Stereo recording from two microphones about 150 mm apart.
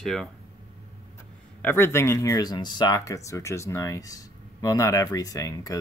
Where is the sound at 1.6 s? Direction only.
15° left (ahead or behind).